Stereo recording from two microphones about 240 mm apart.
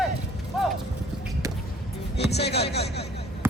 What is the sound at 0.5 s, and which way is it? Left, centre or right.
Clip-clop, centre.